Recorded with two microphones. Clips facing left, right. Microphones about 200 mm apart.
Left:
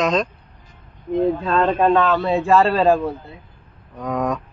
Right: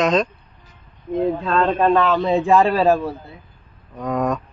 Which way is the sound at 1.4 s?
5° left (ahead or behind).